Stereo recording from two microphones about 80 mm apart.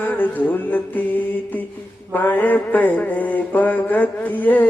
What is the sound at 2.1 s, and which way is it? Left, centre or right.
Mantra, left.